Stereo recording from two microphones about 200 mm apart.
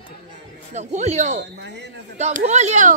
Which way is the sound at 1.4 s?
55° right (ahead or behind).